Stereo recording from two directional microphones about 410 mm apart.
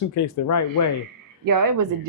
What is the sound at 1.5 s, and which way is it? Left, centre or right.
Speech, right.